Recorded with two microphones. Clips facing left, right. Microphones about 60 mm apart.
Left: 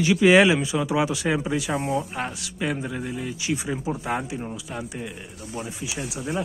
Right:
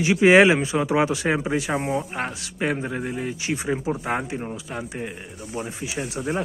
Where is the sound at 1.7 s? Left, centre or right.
Right.